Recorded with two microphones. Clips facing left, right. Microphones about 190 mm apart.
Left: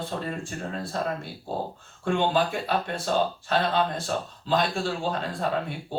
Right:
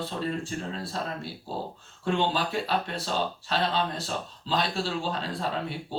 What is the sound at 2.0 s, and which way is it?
Speech, 50° left (ahead or behind).